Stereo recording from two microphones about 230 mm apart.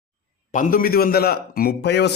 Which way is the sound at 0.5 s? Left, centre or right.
Left.